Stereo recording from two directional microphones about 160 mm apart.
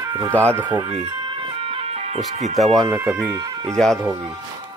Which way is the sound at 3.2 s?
25° right (ahead or behind).